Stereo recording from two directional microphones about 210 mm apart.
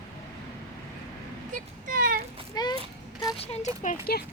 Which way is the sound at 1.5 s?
40° right (ahead or behind).